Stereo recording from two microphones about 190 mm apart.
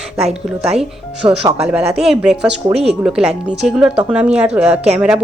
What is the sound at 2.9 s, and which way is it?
Speech, 5° right (ahead or behind).